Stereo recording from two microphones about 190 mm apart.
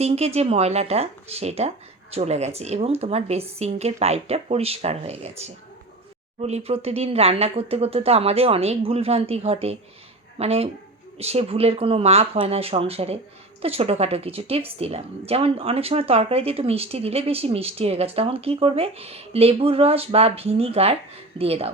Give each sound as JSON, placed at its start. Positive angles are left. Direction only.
{"t": 0.0, "sound": "speech", "side_deg": -35}
{"t": 6.4, "sound": "speech", "side_deg": -35}